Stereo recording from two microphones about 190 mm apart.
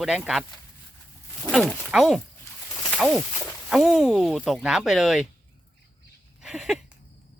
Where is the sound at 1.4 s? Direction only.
Centre (ahead or behind).